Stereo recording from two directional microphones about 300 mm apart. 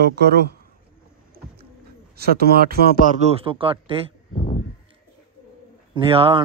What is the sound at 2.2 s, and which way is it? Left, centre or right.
Speech, right.